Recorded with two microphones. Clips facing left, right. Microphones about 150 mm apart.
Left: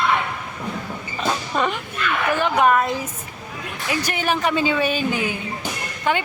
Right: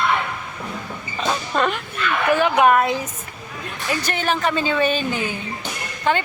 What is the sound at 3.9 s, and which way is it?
Speech, 10° left (ahead or behind).